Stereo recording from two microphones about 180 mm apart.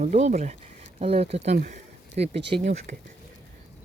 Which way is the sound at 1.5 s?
55° right (ahead or behind).